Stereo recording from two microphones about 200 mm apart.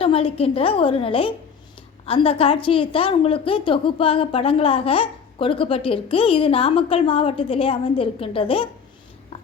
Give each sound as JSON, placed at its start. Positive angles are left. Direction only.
{"t": 0.0, "sound": "a woman's voice", "side_deg": 25}